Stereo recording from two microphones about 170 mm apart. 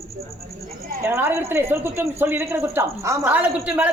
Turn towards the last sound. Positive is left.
turn(degrees=-10)  # may be behind; listen again after turning